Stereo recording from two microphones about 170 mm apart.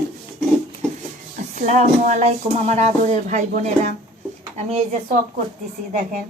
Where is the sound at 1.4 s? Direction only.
45° right (ahead or behind).